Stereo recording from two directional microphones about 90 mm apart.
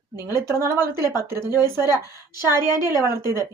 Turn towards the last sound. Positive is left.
turn(degrees=-30)  # may be behind; listen again after turning